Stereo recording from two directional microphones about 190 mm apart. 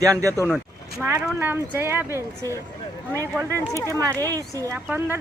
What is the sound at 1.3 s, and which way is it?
Speech, 10° right (ahead or behind).